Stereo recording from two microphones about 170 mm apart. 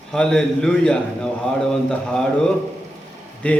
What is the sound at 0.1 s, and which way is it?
Mantra, 5° left (ahead or behind).